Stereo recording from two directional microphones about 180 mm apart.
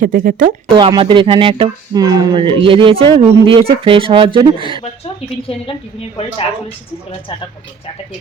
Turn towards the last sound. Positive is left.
turn(degrees=30)  # may be behind; listen again after turning